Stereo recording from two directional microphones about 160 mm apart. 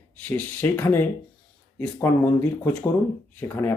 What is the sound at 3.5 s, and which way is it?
Speech, 15° left (ahead or behind).